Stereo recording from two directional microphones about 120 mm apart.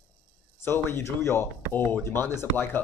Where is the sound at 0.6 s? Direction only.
20° left (ahead or behind).